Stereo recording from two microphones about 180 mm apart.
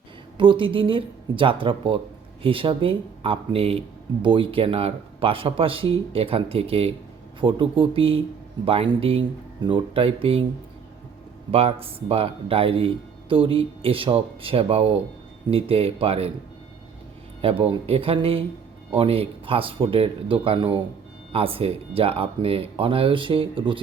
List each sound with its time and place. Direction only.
0.3 s speech: 30° right (ahead or behind)
11.5 s speech: 35° right (ahead or behind)
17.4 s speech: 30° right (ahead or behind)